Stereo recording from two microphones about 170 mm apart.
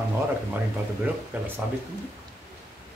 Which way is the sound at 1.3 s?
10° right (ahead or behind).